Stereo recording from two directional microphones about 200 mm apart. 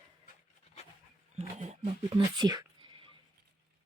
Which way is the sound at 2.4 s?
20° right (ahead or behind).